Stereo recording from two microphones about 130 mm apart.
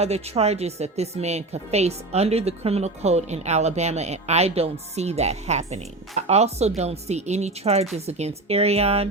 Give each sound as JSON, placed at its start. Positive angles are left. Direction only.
{"t": 0.0, "sound": "a woman's voice", "side_deg": -55}